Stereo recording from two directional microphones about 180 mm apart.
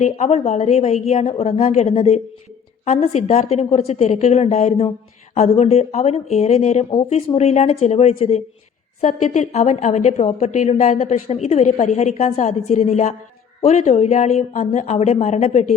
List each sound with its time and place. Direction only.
0.0 s a woman's voice: 40° left (ahead or behind)